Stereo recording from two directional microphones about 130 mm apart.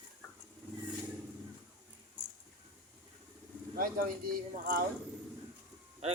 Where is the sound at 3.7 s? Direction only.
90° right.